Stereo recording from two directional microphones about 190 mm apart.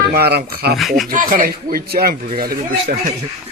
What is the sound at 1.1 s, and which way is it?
Speech, 45° right (ahead or behind).